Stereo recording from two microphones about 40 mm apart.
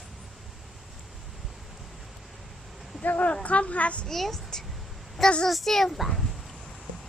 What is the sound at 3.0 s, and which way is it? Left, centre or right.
Speech, left.